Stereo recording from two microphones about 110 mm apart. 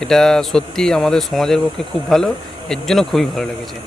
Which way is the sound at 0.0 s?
5° left (ahead or behind).